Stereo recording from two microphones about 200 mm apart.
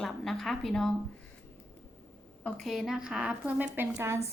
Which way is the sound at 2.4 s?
Centre (ahead or behind).